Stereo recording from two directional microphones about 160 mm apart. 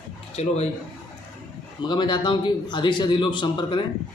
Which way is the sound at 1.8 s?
30° left (ahead or behind).